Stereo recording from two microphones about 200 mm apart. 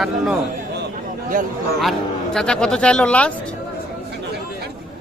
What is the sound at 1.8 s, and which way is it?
A man's voice, centre (ahead or behind).